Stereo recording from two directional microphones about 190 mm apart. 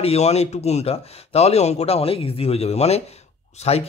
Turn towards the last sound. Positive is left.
turn(degrees=35)  # may be behind; listen again after turning